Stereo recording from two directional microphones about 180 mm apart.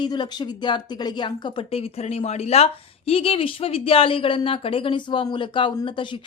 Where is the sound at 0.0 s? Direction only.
25° left (ahead or behind).